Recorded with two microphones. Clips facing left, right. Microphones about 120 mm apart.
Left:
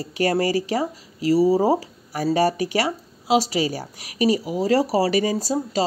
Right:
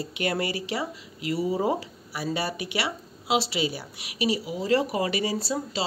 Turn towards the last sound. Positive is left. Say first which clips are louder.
# left 6 dB
turn(degrees=40)  # may be behind; listen again after turning